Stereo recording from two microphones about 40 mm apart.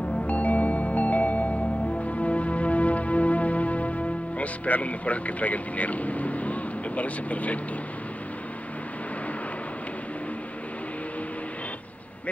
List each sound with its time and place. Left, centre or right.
0.3 s music: left